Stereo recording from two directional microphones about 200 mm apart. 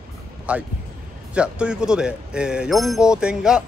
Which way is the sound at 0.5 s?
5° right (ahead or behind).